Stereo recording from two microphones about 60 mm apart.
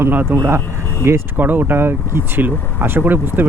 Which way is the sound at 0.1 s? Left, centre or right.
Right.